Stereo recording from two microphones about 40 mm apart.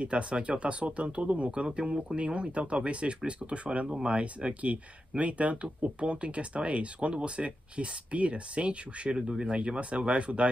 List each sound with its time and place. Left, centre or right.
0.0 s speech: right